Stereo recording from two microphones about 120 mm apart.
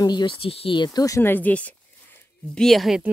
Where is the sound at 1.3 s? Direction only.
15° left (ahead or behind).